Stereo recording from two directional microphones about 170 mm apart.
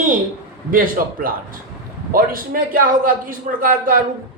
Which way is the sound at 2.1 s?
55° right (ahead or behind).